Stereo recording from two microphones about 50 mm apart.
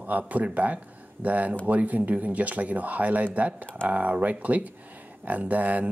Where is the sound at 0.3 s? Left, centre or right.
Right.